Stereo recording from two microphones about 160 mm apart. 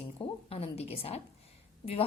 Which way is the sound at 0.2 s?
35° left (ahead or behind).